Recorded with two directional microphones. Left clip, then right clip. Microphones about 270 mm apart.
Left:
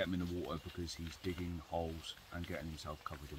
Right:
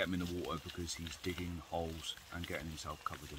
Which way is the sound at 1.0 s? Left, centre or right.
Right.